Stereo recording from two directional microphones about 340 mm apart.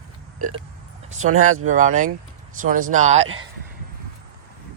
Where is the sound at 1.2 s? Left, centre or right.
Right.